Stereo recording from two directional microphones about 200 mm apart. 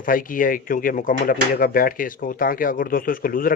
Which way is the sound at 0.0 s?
45° left (ahead or behind).